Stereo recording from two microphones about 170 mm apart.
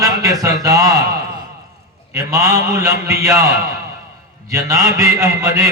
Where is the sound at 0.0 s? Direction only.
20° right (ahead or behind).